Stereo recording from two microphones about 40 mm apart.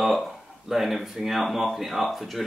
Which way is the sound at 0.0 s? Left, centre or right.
Centre.